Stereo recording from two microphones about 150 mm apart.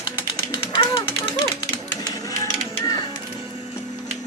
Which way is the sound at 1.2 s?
30° left (ahead or behind).